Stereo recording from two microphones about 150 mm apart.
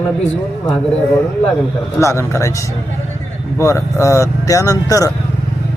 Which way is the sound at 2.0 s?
20° left (ahead or behind).